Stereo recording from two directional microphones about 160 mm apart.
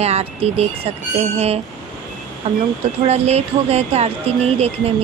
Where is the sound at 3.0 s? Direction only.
40° right (ahead or behind).